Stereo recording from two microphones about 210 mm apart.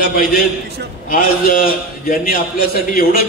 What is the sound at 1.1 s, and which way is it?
A man's voice, 40° left (ahead or behind).